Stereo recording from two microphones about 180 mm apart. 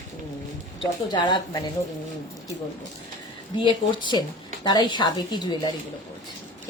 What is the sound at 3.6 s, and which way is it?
Speech, 25° left (ahead or behind).